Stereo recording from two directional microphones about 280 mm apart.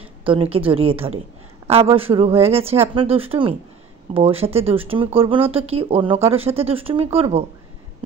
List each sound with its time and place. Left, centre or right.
0.2 s speech: centre